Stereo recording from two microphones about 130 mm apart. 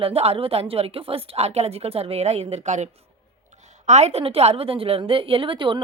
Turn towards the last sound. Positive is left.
turn(degrees=-40)  # may be behind; listen again after turning